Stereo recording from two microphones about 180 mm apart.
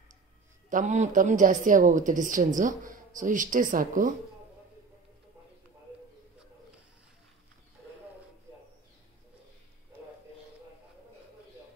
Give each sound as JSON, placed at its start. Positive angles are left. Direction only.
{"t": 0.7, "sound": "a woman's voice", "side_deg": -45}